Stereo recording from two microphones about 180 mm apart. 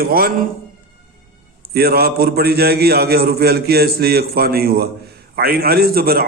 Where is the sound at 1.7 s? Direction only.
60° right (ahead or behind).